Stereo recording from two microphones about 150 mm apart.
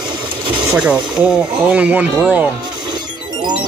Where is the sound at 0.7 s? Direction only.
10° right (ahead or behind).